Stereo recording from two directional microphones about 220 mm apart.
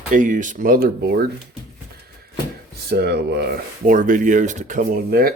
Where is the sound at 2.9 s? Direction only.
45° right (ahead or behind).